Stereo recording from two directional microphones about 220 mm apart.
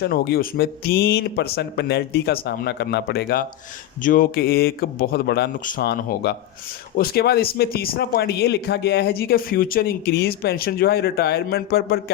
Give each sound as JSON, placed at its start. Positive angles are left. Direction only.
{"t": 0.0, "sound": "speech", "side_deg": 45}